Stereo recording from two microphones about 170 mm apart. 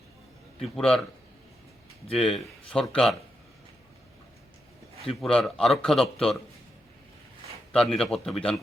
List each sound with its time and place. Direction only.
0.6 s a man's voice: 5° left (ahead or behind)
2.1 s a man's voice: 5° left (ahead or behind)
5.0 s a man's voice: centre (ahead or behind)
7.7 s a man's voice: 5° left (ahead or behind)